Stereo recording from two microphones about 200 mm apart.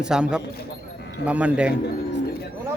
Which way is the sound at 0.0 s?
5° right (ahead or behind).